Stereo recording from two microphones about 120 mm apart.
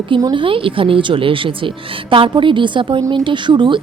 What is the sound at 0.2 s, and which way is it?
A woman's voice, 40° right (ahead or behind).